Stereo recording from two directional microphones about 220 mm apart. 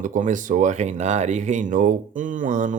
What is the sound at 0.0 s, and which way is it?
Speech, 35° right (ahead or behind).